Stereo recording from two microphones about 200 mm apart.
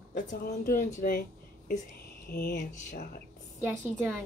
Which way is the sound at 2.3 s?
45° left (ahead or behind).